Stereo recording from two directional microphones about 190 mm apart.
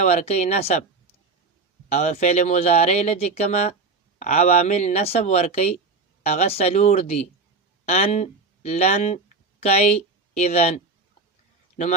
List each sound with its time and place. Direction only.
0.0 s speech: 35° left (ahead or behind)
1.9 s speech: 35° left (ahead or behind)